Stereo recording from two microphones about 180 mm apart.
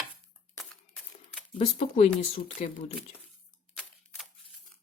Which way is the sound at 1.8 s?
45° left (ahead or behind).